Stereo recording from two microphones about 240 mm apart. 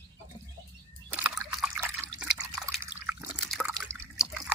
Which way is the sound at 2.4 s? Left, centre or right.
Centre.